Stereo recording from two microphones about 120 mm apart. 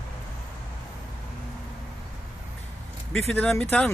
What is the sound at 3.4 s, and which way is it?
Speech, 10° left (ahead or behind).